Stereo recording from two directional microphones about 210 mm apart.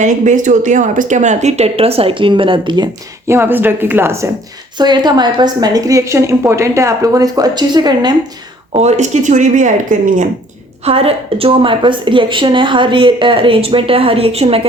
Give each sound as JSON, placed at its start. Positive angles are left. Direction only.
{"t": 0.0, "sound": "a woman's voice", "side_deg": -35}
{"t": 8.7, "sound": "speech", "side_deg": -30}
{"t": 10.8, "sound": "speech", "side_deg": -30}